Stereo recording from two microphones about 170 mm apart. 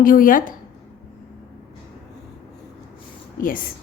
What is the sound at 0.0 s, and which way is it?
Speech, 55° left (ahead or behind).